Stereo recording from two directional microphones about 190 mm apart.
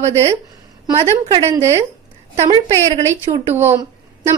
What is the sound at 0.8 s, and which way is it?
Speech, 20° right (ahead or behind).